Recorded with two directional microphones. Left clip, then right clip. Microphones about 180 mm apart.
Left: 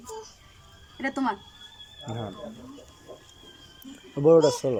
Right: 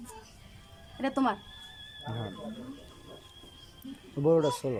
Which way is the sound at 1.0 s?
15° right (ahead or behind).